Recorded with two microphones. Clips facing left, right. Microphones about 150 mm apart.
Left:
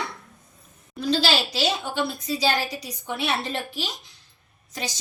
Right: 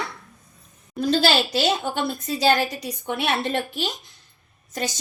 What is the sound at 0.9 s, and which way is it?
A woman's voice, 50° right (ahead or behind).